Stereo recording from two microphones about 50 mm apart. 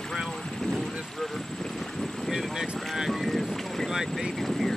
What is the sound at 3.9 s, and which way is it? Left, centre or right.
Speech, centre.